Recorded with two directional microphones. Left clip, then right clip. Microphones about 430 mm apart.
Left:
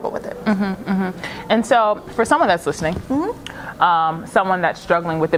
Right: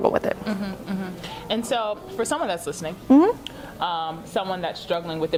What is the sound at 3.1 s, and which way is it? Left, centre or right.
Speech, right.